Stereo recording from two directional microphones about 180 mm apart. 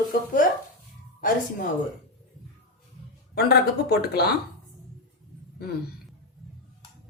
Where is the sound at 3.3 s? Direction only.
60° left (ahead or behind).